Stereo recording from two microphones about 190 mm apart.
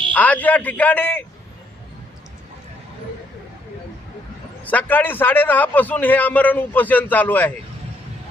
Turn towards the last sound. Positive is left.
turn(degrees=10)  # may be behind; listen again after turning